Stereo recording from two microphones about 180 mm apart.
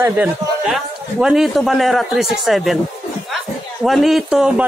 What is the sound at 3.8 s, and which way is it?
Speech, centre (ahead or behind).